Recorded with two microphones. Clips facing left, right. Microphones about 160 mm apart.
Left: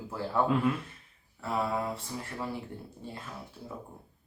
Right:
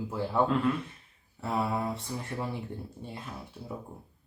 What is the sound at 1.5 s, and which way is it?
Speech, 15° right (ahead or behind).